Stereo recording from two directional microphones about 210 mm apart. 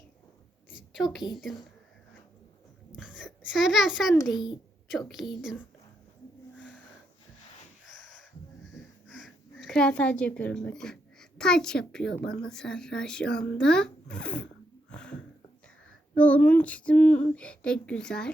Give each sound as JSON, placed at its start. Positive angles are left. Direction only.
{"t": 0.9, "sound": "a woman's voice", "side_deg": 0}
{"t": 3.2, "sound": "a child's voice", "side_deg": 0}
{"t": 4.2, "sound": "a child's voice", "side_deg": 20}
{"t": 4.9, "sound": "speech", "side_deg": 0}
{"t": 6.6, "sound": "a sound", "side_deg": 5}
{"t": 9.6, "sound": "speech", "side_deg": 5}
{"t": 14.8, "sound": "a sound", "side_deg": 5}
{"t": 16.1, "sound": "speech", "side_deg": 5}